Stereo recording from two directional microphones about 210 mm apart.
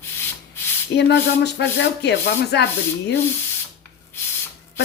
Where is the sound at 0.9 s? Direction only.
55° left (ahead or behind).